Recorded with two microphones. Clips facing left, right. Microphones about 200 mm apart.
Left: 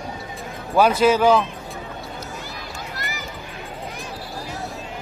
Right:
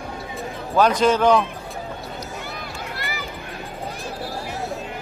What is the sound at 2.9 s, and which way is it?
Run, 45° left (ahead or behind).